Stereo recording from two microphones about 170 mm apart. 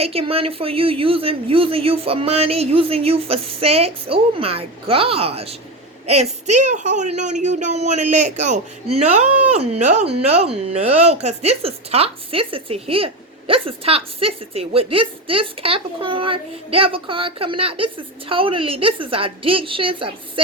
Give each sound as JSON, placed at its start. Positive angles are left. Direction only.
{"t": 0.0, "sound": "speech", "side_deg": -35}